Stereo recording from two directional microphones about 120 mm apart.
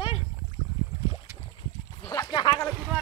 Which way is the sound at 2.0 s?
30° left (ahead or behind).